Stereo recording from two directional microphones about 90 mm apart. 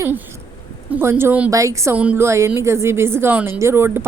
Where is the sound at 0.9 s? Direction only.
25° right (ahead or behind).